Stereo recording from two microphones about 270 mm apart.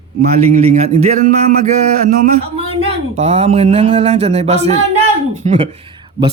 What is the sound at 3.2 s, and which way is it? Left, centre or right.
A man's voice, right.